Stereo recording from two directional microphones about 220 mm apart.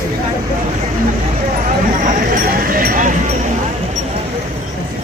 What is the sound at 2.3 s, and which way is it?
Speech, 40° right (ahead or behind).